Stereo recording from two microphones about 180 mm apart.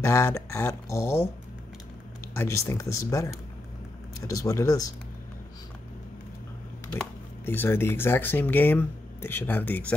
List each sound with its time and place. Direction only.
0.0 s speech: 15° left (ahead or behind)
2.3 s speech: 15° left (ahead or behind)
4.3 s speech: 20° left (ahead or behind)
6.9 s speech: 10° left (ahead or behind)